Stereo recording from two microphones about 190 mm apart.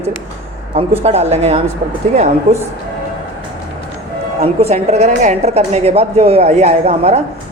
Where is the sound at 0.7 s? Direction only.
35° right (ahead or behind).